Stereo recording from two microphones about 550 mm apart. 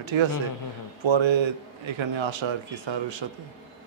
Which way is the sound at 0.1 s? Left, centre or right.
Right.